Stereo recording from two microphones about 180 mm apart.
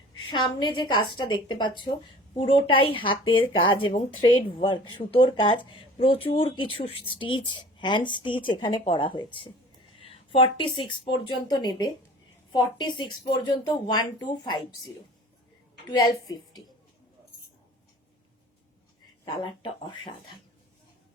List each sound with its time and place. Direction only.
0.3 s speech: 25° left (ahead or behind)
15.9 s speech: 20° left (ahead or behind)